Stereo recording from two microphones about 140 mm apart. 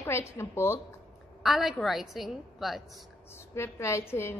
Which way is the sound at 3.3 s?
20° left (ahead or behind).